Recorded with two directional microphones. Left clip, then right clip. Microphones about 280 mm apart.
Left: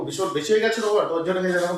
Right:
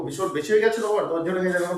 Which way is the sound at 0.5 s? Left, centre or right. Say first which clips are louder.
Even; centre.